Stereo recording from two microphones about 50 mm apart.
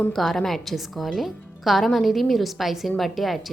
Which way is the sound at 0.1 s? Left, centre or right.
Centre.